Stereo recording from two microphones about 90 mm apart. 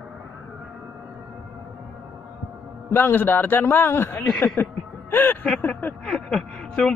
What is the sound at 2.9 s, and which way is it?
A man's voice, 25° left (ahead or behind).